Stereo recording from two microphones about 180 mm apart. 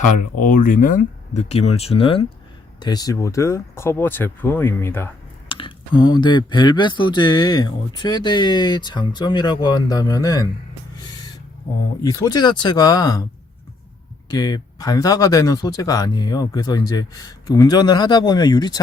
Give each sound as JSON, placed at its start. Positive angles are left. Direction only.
{"t": 0.3, "sound": "speech", "side_deg": 50}
{"t": 5.5, "sound": "speech", "side_deg": 30}
{"t": 12.0, "sound": "speech", "side_deg": 20}
{"t": 14.3, "sound": "speech", "side_deg": 20}